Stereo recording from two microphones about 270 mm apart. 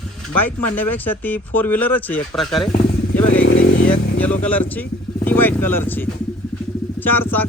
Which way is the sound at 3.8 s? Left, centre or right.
Centre.